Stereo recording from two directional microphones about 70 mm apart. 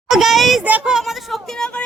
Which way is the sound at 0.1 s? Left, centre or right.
Centre.